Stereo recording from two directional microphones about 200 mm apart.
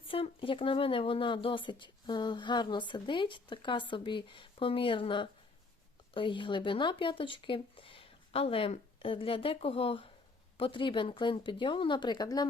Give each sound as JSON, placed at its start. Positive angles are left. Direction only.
{"t": 0.1, "sound": "speech", "side_deg": 25}